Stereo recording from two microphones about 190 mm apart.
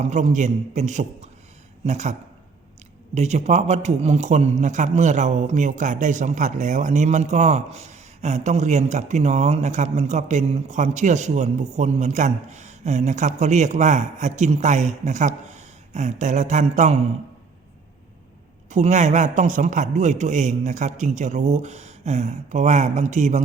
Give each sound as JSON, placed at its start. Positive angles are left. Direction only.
{"t": 0.0, "sound": "speech", "side_deg": -40}
{"t": 3.2, "sound": "speech", "side_deg": -35}
{"t": 18.7, "sound": "speech", "side_deg": -40}